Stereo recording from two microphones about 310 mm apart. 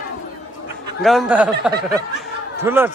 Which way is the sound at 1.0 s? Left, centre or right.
Centre.